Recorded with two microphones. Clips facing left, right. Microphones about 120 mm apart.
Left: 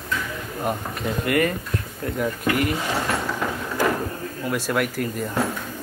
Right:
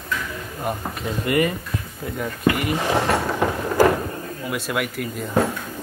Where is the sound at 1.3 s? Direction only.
15° right (ahead or behind).